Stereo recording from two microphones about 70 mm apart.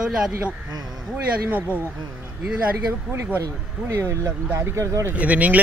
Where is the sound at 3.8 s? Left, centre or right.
Right.